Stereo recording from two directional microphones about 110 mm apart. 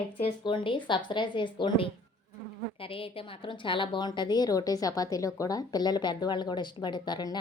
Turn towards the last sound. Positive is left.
turn(degrees=40)  # may be behind; listen again after turning